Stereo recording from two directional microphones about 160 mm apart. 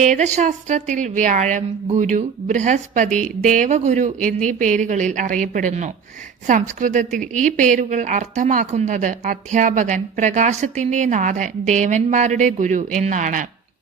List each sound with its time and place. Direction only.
0.0 s a woman's voice: 50° right (ahead or behind)